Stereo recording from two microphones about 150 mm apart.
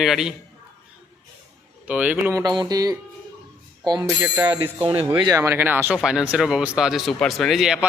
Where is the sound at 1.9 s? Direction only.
10° right (ahead or behind).